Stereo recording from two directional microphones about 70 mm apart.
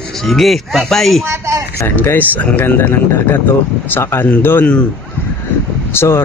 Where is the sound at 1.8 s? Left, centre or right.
Left.